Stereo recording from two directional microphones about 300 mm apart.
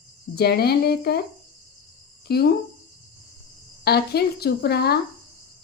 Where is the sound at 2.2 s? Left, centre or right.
Left.